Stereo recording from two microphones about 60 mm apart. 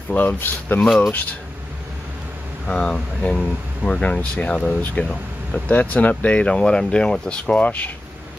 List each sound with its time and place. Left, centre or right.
0.1 s speech: left
0.8 s speech: centre
2.6 s speech: centre
7.6 s speech: left